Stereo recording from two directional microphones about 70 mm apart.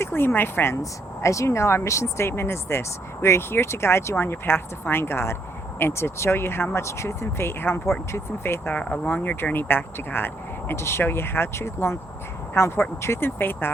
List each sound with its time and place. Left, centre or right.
0.0 s speech: left
0.8 s speech: left
8.7 s speech: left